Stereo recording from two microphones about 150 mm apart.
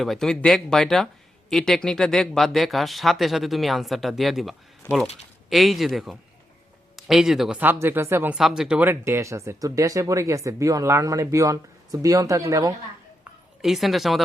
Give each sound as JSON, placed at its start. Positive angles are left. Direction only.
{"t": 0.0, "sound": "speech", "side_deg": 0}
{"t": 7.6, "sound": "speech", "side_deg": -15}
{"t": 8.4, "sound": "speech", "side_deg": -5}
{"t": 13.6, "sound": "speech", "side_deg": 0}